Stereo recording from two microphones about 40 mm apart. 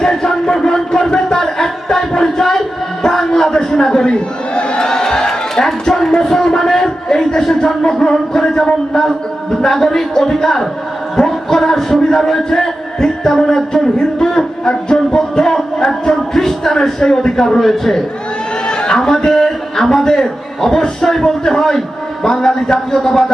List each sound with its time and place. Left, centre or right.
0.0 s speech: centre
3.0 s crowd: centre
4.9 s a sound: centre
11.2 s music: centre
18.7 s a sound: centre
19.0 s a man's voice: centre